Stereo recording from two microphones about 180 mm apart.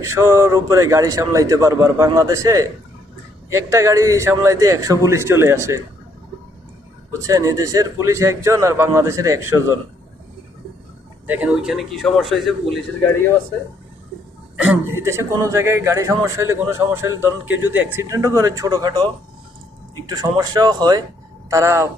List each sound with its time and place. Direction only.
0.0 s a man's voice: 15° right (ahead or behind)
7.1 s a man's voice: 20° right (ahead or behind)
11.3 s speech: 5° right (ahead or behind)
14.7 s a man's voice: 15° right (ahead or behind)
20.1 s a man's voice: 20° right (ahead or behind)